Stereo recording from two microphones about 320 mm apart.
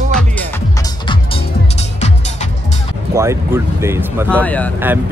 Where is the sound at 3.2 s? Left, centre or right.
Centre.